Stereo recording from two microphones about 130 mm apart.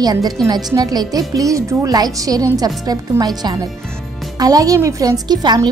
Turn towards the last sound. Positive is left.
turn(degrees=-35)  # may be behind; listen again after turning